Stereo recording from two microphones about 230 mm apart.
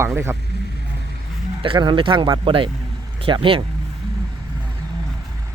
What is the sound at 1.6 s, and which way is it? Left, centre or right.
Speech, right.